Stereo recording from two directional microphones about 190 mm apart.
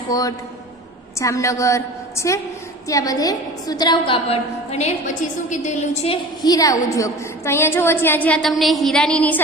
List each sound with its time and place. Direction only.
0.1 s a woman's voice: 20° left (ahead or behind); by 6.1 s 35° left (ahead or behind)
6.4 s a woman's voice: 20° left (ahead or behind)